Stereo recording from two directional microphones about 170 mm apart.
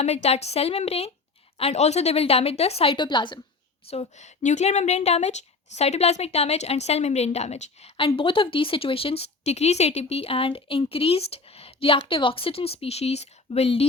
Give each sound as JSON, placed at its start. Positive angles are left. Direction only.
{"t": 0.0, "sound": "a woman's voice", "side_deg": 40}
{"t": 3.8, "sound": "a woman's voice", "side_deg": 35}